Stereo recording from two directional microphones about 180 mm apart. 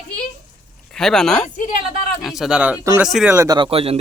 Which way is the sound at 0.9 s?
5° left (ahead or behind).